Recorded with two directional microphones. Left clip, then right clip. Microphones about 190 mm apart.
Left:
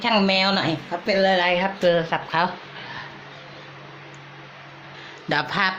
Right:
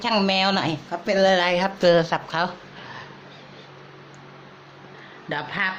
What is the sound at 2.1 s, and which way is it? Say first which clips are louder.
Speech: left 2 dB; centre (ahead or behind).